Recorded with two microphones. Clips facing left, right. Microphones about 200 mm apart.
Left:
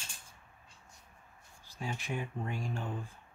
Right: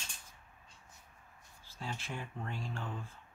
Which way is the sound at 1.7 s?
15° left (ahead or behind).